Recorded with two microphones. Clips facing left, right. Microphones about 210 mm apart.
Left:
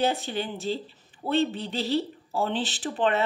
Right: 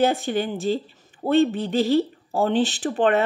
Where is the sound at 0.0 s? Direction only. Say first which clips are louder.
Right 6 dB; 45° right (ahead or behind).